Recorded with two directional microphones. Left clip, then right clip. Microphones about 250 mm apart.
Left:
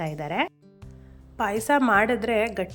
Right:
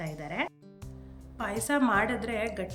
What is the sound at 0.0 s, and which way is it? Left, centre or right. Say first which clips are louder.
A woman's voice: left 7 dB; centre.